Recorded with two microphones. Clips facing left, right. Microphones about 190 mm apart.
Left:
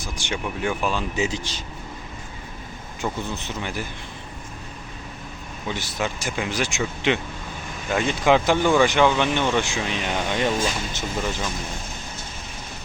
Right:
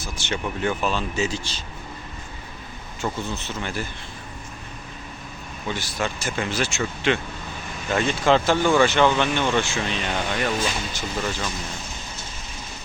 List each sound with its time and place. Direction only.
0.0 s speech: 15° left (ahead or behind)
3.0 s speech: 15° left (ahead or behind)
5.6 s speech: 15° left (ahead or behind)